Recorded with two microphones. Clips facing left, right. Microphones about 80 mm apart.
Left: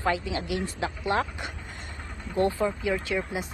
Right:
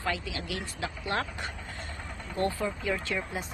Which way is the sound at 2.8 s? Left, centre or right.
Centre.